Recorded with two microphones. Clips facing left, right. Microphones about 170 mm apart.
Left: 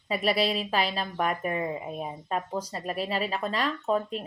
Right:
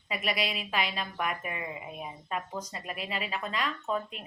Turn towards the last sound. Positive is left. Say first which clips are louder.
# left 6 dB
turn(degrees=35)  # may be behind; listen again after turning